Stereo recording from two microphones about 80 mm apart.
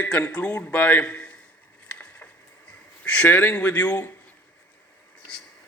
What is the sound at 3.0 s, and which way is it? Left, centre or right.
A man's voice, centre.